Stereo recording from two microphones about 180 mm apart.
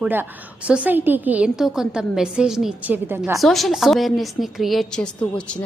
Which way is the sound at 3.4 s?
Centre (ahead or behind).